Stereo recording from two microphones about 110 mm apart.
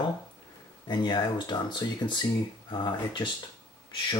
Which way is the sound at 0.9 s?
45° left (ahead or behind).